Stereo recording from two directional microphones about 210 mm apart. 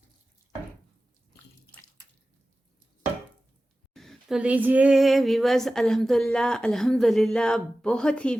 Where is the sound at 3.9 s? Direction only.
Centre (ahead or behind).